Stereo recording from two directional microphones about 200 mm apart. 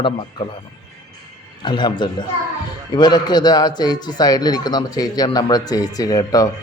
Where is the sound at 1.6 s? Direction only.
20° left (ahead or behind).